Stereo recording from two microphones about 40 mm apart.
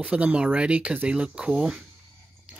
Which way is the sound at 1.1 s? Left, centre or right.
Right.